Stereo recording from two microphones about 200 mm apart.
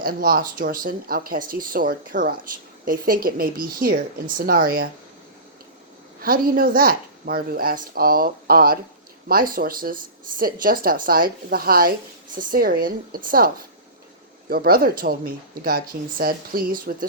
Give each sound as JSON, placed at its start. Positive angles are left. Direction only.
{"t": 0.0, "sound": "speech", "side_deg": -45}
{"t": 6.2, "sound": "speech", "side_deg": -45}
{"t": 14.5, "sound": "speech", "side_deg": -50}